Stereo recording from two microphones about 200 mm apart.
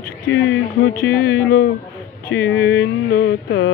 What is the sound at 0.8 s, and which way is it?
Speech, 50° left (ahead or behind).